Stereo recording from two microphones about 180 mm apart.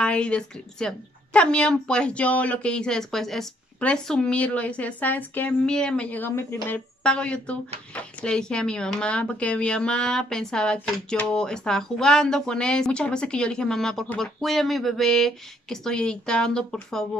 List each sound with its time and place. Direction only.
0.0 s speech: 5° left (ahead or behind)